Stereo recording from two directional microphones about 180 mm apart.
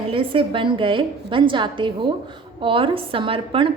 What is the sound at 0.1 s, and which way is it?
A woman's voice, 30° right (ahead or behind).